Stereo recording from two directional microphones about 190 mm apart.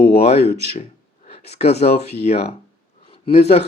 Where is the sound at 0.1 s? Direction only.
35° left (ahead or behind).